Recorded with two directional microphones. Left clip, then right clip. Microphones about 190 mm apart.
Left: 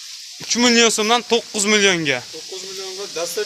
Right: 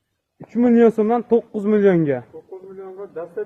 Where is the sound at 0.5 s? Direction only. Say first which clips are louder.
Even; centre (ahead or behind).